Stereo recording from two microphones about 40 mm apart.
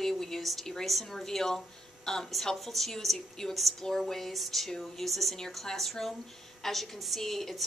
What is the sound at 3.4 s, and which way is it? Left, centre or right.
A woman's voice, centre.